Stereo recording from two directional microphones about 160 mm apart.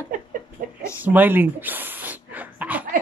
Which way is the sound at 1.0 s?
10° right (ahead or behind).